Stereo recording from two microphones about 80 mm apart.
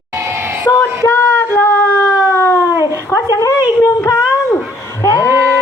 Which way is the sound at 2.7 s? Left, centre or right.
Left.